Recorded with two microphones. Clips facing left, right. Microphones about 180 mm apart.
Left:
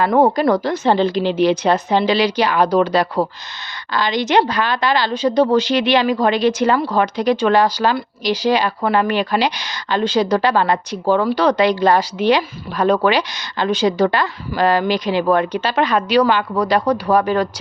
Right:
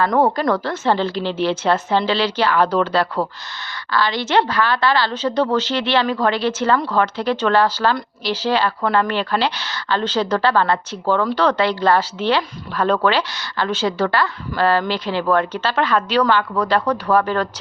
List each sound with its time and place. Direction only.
0.2 s speech: 15° left (ahead or behind)